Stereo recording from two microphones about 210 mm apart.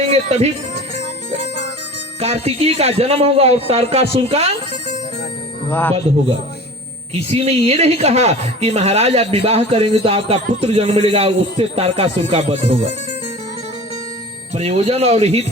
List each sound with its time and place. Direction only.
0.1 s speech: 30° right (ahead or behind)
1.4 s music: 55° left (ahead or behind)
2.2 s a woman's voice: 30° right (ahead or behind)
7.1 s a woman's voice: 30° right (ahead or behind)
14.5 s a woman's voice: 30° right (ahead or behind)